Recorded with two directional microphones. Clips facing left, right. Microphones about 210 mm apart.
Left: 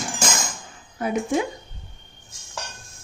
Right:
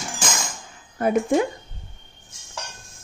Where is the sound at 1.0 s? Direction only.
55° right (ahead or behind).